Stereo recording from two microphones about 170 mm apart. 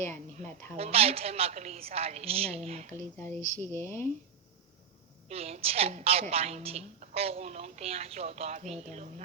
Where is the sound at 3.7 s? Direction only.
15° left (ahead or behind).